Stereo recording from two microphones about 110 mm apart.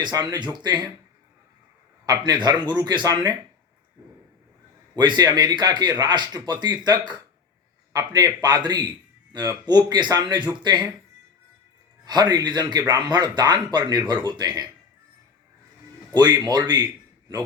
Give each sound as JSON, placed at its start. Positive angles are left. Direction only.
{"t": 0.0, "sound": "speech", "side_deg": -40}
{"t": 2.0, "sound": "speech", "side_deg": -40}
{"t": 4.9, "sound": "speech", "side_deg": -40}
{"t": 12.0, "sound": "speech", "side_deg": -40}
{"t": 16.1, "sound": "speech", "side_deg": -40}